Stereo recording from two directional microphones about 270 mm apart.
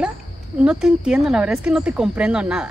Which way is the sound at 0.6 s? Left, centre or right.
Centre.